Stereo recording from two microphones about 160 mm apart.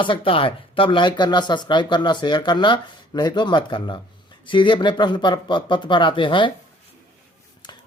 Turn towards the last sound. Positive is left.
turn(degrees=30)  # may be behind; listen again after turning